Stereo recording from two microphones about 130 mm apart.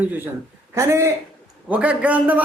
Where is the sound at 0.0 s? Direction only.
15° right (ahead or behind).